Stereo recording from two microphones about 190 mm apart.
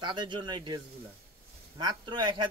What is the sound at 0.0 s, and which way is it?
Speech, 25° right (ahead or behind).